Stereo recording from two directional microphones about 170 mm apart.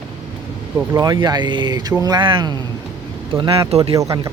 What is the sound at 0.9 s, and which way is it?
Speech, 25° right (ahead or behind).